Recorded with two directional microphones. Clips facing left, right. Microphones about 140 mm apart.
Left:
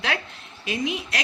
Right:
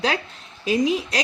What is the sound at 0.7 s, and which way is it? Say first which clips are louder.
Speech: right 7 dB; 35° right (ahead or behind).